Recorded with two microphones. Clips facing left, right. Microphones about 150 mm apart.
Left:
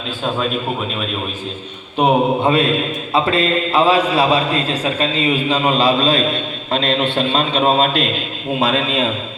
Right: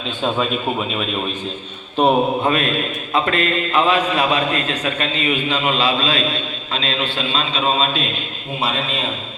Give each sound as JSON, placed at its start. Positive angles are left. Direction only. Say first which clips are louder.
{"t": 2.0, "sound": "a man's voice", "louder": "even", "side_deg": 10}
{"t": 2.4, "sound": "a man's voice", "louder": "left 4 dB", "side_deg": 30}